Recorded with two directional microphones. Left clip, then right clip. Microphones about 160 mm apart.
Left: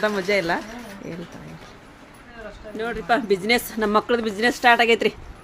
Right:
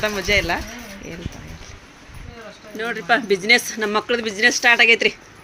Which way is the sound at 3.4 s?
15° left (ahead or behind).